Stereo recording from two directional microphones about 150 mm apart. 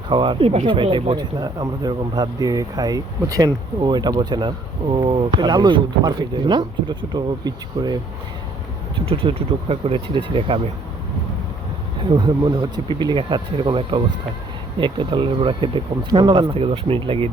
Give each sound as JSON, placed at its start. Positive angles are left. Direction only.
{"t": 0.1, "sound": "speech", "side_deg": -35}
{"t": 9.0, "sound": "speech", "side_deg": -40}
{"t": 12.0, "sound": "speech", "side_deg": -30}